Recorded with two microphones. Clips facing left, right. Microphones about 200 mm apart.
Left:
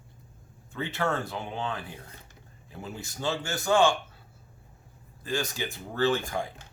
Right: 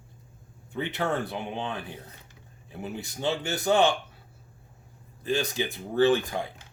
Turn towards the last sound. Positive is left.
turn(degrees=-15)  # may be behind; listen again after turning